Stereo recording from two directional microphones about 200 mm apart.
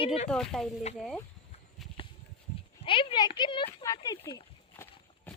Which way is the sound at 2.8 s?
25° left (ahead or behind).